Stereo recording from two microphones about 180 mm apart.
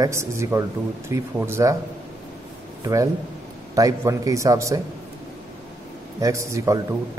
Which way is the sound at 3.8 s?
20° right (ahead or behind).